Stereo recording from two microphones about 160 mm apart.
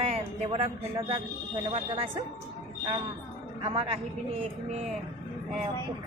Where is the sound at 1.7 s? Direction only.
35° right (ahead or behind).